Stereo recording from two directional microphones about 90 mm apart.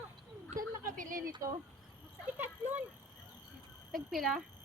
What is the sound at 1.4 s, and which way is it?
Speech, 40° right (ahead or behind).